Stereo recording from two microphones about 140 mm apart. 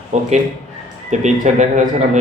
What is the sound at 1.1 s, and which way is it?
Speech, 60° right (ahead or behind).